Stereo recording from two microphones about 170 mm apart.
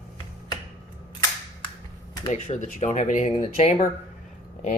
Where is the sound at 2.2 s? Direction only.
40° left (ahead or behind).